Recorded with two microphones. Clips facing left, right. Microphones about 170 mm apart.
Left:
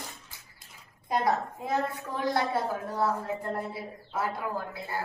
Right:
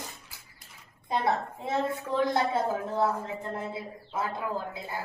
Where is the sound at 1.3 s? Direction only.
25° right (ahead or behind).